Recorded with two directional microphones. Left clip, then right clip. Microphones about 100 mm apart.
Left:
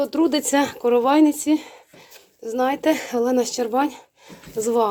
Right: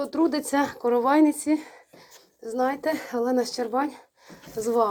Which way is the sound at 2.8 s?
75° left (ahead or behind).